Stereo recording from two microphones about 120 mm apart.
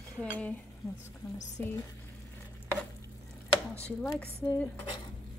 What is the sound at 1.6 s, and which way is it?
Cutlery, 15° left (ahead or behind).